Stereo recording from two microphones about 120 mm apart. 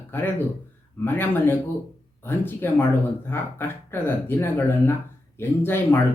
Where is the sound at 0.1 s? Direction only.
15° left (ahead or behind).